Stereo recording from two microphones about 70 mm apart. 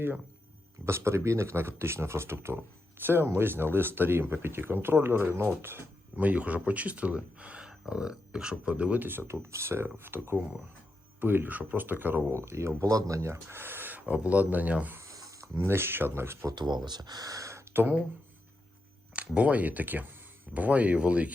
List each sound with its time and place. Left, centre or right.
0.9 s speech: right
6.1 s speech: right
12.3 s speech: right
14.9 s a sound: right
15.5 s speech: right
16.5 s speech: right
17.7 s speech: right
19.1 s speech: centre